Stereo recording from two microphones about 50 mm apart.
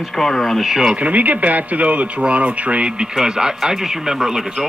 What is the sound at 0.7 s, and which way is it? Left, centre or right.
Speech, centre.